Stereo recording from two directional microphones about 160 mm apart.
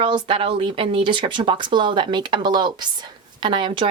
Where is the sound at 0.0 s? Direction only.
30° right (ahead or behind).